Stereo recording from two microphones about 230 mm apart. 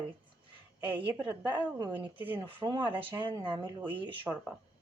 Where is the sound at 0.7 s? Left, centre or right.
Centre.